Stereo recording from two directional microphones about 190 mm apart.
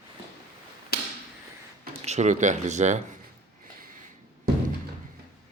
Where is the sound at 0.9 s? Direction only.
60° left (ahead or behind).